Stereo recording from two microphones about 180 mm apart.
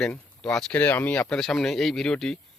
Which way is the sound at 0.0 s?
5° left (ahead or behind).